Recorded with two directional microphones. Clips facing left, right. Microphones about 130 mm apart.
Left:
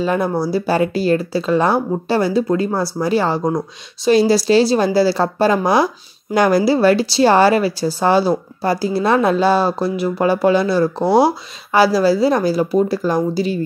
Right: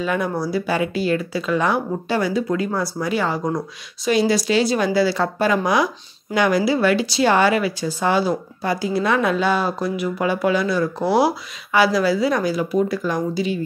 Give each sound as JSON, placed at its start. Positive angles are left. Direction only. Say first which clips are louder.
{"t": 0.0, "sound": "speech", "louder": "left 4 dB", "side_deg": 35}